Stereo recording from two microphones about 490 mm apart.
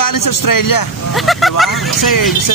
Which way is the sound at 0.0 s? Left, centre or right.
Left.